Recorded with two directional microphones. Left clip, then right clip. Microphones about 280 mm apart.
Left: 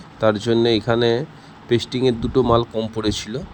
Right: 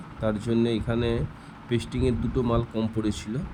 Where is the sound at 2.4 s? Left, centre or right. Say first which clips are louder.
Left 9 dB; left.